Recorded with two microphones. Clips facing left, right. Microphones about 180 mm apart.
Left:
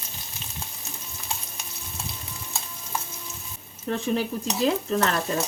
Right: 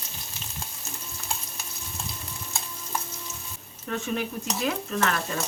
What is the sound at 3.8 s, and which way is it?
Speech, 30° left (ahead or behind).